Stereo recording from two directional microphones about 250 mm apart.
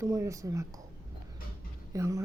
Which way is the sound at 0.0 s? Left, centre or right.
Centre.